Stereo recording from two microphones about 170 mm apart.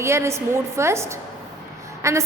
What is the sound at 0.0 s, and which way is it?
A woman's voice, 15° right (ahead or behind).